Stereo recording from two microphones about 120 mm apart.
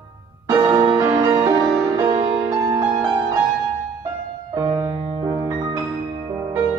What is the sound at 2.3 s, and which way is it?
Music, 10° right (ahead or behind).